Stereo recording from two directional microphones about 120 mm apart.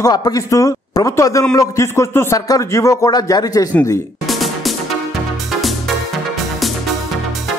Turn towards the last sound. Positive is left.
turn(degrees=0)  # may be behind; listen again after turning